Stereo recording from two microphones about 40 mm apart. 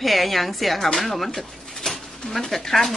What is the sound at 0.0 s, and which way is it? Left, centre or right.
Speech, centre.